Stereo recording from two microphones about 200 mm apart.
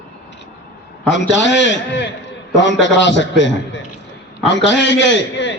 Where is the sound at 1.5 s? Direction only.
65° left (ahead or behind).